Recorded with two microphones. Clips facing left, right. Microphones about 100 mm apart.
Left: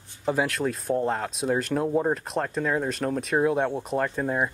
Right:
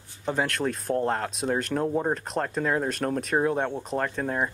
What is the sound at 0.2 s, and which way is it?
Speech, 5° left (ahead or behind).